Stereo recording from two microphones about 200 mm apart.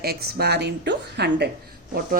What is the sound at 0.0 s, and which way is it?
Speech, 50° right (ahead or behind).